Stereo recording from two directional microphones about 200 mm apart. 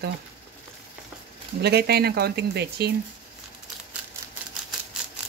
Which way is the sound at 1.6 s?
55° right (ahead or behind).